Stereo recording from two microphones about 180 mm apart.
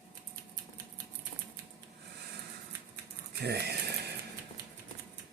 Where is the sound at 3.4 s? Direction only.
65° right (ahead or behind).